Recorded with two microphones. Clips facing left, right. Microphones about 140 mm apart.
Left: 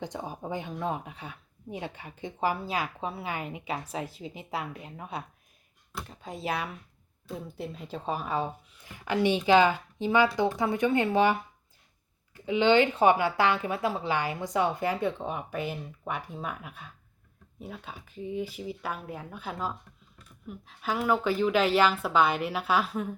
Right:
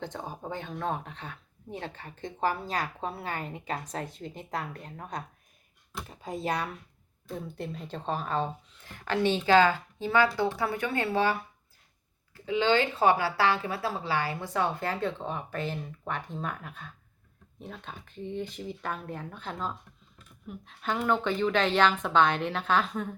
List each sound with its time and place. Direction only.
0.0 s speech: 15° left (ahead or behind)